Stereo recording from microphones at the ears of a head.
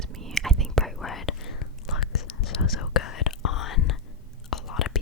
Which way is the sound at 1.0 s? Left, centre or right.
Left.